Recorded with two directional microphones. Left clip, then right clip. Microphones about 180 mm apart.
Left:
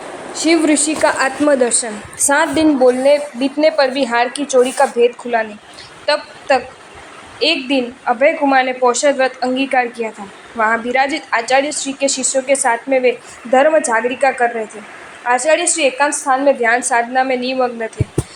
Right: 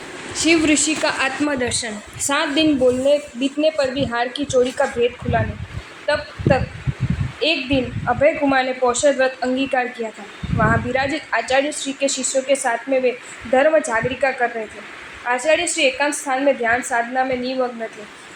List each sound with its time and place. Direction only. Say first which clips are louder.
0.3 s a woman's voice: left 3 dB; 5° left (ahead or behind); by 6.2 s 30° left (ahead or behind)
7.3 s a woman's voice: left 4 dB; 20° left (ahead or behind)